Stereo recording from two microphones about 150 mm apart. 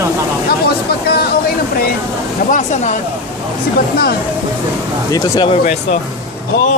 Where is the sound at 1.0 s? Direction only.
90° left.